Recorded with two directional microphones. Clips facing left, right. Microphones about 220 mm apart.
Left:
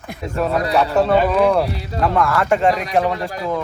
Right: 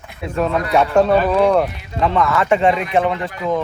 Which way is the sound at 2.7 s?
40° left (ahead or behind).